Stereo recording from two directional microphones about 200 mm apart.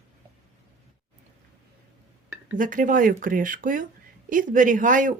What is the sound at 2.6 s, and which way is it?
Speech, 40° right (ahead or behind).